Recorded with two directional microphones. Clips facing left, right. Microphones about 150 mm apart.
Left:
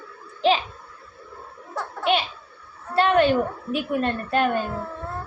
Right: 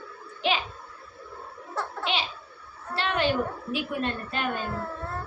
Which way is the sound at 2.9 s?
50° left (ahead or behind).